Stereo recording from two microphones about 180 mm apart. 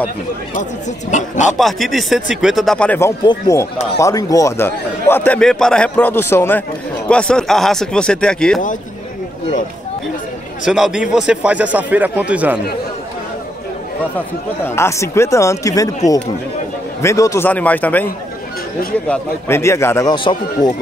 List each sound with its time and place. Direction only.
1.1 s speech: 40° left (ahead or behind)
1.6 s speech: centre (ahead or behind)
3.3 s a man's voice: 15° left (ahead or behind)
10.6 s a man's voice: 5° right (ahead or behind)
14.8 s a man's voice: 15° left (ahead or behind)
17.0 s a man's voice: 15° left (ahead or behind)
19.0 s a man's voice: 15° left (ahead or behind)